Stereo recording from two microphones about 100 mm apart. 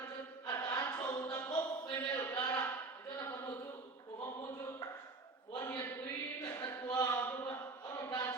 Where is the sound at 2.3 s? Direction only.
35° left (ahead or behind).